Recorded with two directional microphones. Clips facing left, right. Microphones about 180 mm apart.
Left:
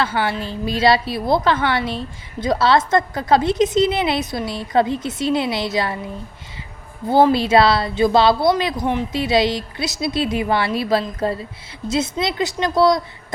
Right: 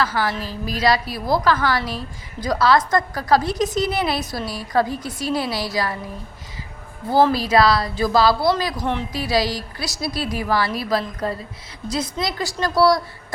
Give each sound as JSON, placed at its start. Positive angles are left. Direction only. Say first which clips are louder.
{"t": 0.0, "sound": "a woman's voice", "louder": "left 1 dB", "side_deg": 25}
{"t": 7.1, "sound": "a woman's voice", "louder": "left 3 dB", "side_deg": 25}